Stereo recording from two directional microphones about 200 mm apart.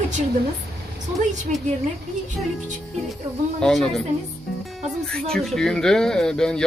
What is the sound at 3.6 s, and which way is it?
Speech, 5° left (ahead or behind).